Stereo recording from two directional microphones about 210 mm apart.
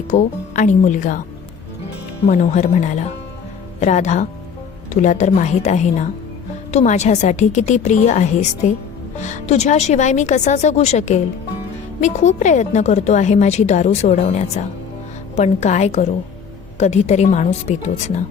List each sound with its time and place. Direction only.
0.1 s a woman's voice: 35° left (ahead or behind)
2.2 s a woman's voice: 30° left (ahead or behind)